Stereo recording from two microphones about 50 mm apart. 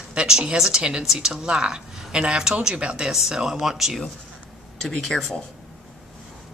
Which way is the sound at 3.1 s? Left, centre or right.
Centre.